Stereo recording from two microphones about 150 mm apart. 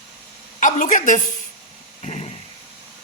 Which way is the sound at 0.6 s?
60° left (ahead or behind).